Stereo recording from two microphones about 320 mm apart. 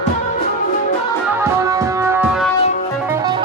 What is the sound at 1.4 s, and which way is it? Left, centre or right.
Music, centre.